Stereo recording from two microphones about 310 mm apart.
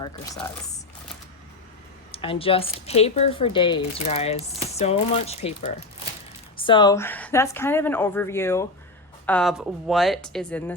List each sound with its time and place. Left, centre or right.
0.0 s speech: centre
2.1 s speech: centre